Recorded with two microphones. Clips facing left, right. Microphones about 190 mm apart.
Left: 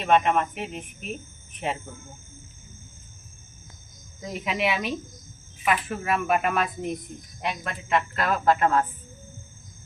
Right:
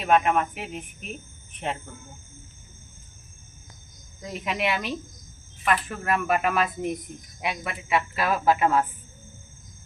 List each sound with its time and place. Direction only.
0.0 s speech: centre (ahead or behind)
4.2 s a woman's voice: centre (ahead or behind)